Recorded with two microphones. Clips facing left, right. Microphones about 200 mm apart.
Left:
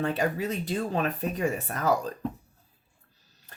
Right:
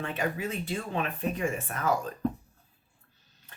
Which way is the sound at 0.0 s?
35° left (ahead or behind).